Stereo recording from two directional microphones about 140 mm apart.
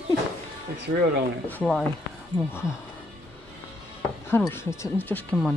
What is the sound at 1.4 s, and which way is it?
Speech, 10° left (ahead or behind).